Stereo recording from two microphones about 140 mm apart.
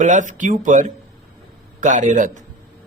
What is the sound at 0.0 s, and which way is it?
A man's voice, 65° right (ahead or behind).